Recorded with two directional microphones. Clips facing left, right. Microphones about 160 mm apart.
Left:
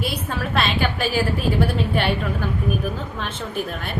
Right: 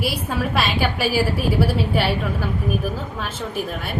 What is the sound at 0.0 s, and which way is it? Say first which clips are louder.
A woman's voice: right 2 dB; 10° right (ahead or behind).